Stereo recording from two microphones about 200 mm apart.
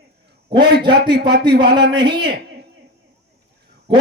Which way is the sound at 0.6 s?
55° right (ahead or behind).